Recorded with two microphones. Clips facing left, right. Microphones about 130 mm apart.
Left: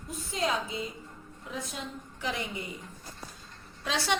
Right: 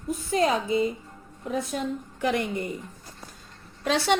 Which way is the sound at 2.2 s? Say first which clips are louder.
Right 8 dB; 55° right (ahead or behind).